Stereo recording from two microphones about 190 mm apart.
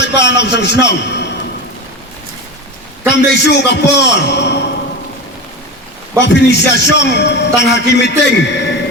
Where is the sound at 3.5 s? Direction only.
65° left (ahead or behind).